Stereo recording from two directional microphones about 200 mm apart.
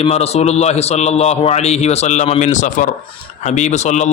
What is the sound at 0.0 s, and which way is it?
A man's voice, 30° left (ahead or behind).